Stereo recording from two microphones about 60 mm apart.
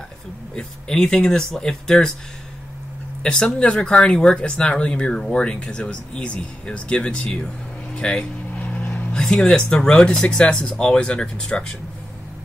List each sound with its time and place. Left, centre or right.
0.6 s speech: centre
3.2 s speech: centre
8.5 s vehicle: left
9.1 s speech: centre